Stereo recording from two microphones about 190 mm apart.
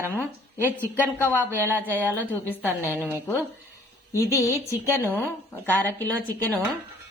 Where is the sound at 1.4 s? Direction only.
10° right (ahead or behind).